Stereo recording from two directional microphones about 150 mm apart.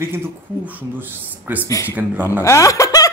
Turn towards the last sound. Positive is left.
turn(degrees=25)  # may be behind; listen again after turning